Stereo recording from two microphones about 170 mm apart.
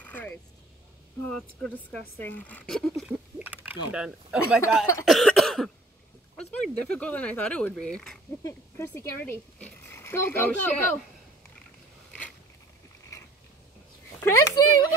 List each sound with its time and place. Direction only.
0.0 s vehicle: 10° left (ahead or behind)
1.6 s speech: 10° left (ahead or behind)
8.5 s speech: 15° left (ahead or behind)
14.2 s speech: 20° left (ahead or behind)